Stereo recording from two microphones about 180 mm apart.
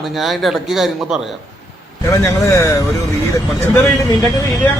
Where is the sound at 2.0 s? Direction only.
15° left (ahead or behind).